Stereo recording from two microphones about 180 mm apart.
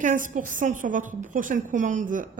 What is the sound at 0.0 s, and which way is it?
A woman's voice, 45° right (ahead or behind).